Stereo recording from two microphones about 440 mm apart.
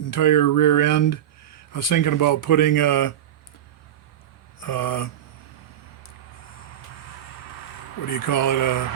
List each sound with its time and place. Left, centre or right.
0.0 s speech: left
4.6 s speech: left
8.1 s speech: left